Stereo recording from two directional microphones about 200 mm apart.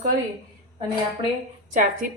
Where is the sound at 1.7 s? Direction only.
40° right (ahead or behind).